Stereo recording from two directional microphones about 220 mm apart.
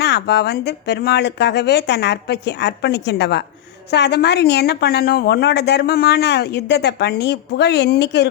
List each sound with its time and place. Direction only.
0.0 s a woman's voice: 50° left (ahead or behind)